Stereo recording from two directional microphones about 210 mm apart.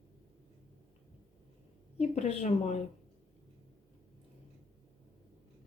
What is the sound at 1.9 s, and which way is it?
Speech, 30° left (ahead or behind).